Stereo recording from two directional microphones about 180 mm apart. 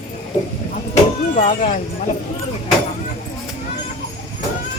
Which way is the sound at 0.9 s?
45° left (ahead or behind).